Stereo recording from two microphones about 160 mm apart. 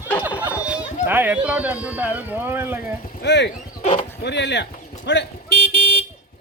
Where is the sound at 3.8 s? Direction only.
45° left (ahead or behind).